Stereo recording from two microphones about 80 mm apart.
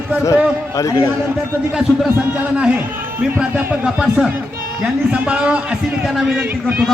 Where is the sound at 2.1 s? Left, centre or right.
Centre.